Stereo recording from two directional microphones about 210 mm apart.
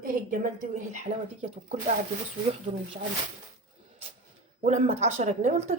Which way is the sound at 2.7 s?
25° right (ahead or behind).